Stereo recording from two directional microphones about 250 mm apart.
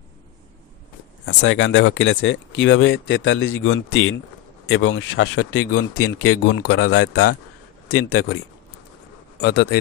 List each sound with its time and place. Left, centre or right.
1.2 s speech: left
5.1 s speech: left
9.4 s speech: left